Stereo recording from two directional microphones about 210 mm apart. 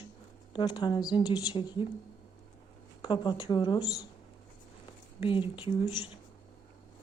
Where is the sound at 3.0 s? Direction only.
20° left (ahead or behind).